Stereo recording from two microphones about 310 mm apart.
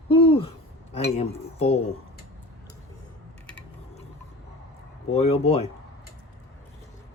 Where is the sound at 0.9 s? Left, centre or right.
Centre.